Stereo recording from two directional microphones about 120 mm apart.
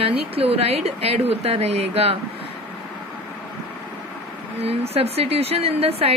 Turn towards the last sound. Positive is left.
turn(degrees=-55)  # may be behind; listen again after turning